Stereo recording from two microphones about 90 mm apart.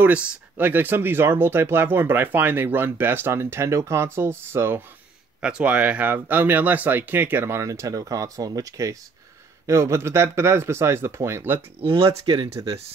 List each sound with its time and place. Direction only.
0.0 s speech: 15° right (ahead or behind)
5.4 s speech: 10° right (ahead or behind)
11.8 s speech: 90° right
12.3 s speech: 65° right (ahead or behind)